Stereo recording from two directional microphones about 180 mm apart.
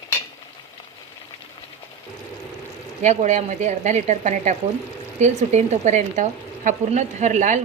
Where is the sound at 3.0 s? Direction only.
40° right (ahead or behind).